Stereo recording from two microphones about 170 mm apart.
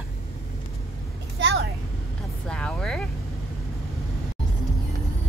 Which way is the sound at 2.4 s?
5° left (ahead or behind).